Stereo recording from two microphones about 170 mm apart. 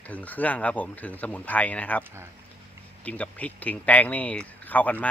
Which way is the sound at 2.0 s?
15° right (ahead or behind).